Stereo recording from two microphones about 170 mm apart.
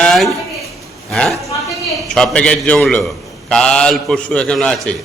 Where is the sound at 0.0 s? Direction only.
Centre (ahead or behind).